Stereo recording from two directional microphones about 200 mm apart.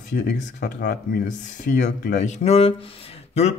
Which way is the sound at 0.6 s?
50° left (ahead or behind).